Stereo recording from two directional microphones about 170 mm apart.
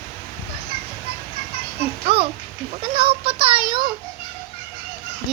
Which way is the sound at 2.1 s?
35° right (ahead or behind).